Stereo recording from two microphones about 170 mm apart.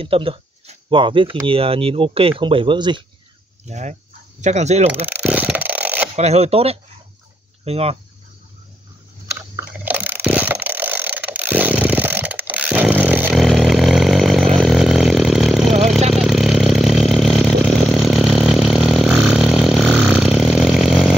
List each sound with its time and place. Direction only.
0.0 s speech: 35° right (ahead or behind)
3.6 s speech: 45° right (ahead or behind)
5.0 s a sound: 10° right (ahead or behind)
6.1 s speech: 40° right (ahead or behind)
9.8 s mechanisms: 10° right (ahead or behind)
13.4 s chainsaw: centre (ahead or behind)
16.1 s a sound: centre (ahead or behind)
17.9 s vehicle: centre (ahead or behind)